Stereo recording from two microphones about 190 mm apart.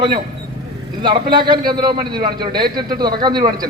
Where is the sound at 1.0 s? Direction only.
25° right (ahead or behind).